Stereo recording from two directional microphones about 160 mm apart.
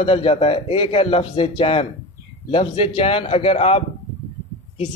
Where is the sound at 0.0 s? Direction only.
35° left (ahead or behind).